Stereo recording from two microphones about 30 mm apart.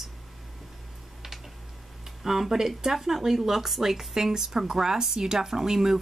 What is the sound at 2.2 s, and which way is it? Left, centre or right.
Speech, centre.